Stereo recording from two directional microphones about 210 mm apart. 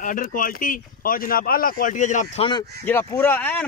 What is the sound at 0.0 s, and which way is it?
Speech, 40° left (ahead or behind).